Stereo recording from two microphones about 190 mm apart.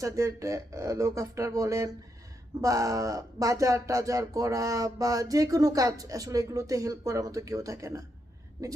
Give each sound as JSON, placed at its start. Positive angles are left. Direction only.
{"t": 0.0, "sound": "speech", "side_deg": -15}